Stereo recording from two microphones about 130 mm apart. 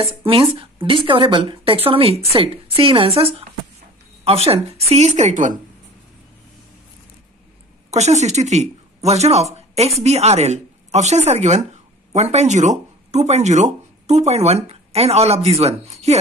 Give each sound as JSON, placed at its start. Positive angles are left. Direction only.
{"t": 0.0, "sound": "speech", "side_deg": -45}
{"t": 4.5, "sound": "a woman's voice", "side_deg": -50}
{"t": 7.9, "sound": "a woman's voice", "side_deg": -60}